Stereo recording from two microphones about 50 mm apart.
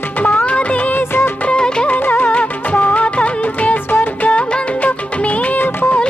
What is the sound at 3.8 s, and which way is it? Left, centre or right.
Music, left.